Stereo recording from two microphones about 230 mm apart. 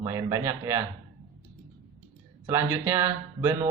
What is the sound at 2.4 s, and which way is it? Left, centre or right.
A man's voice, centre.